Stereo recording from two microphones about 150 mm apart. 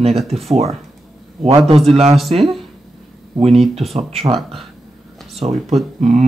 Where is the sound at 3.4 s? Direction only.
45° right (ahead or behind).